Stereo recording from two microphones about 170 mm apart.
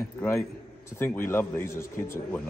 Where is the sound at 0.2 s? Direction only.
15° left (ahead or behind).